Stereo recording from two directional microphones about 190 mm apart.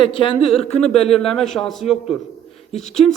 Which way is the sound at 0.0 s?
25° left (ahead or behind).